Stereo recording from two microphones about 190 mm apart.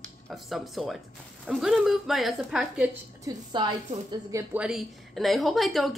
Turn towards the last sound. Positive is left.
turn(degrees=0)  # may be behind; listen again after turning